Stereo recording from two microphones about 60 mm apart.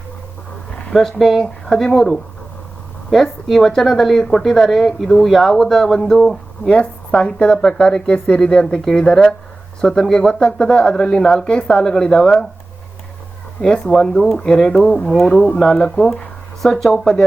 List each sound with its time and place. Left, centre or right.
0.9 s a woman's voice: centre
13.6 s a woman's voice: centre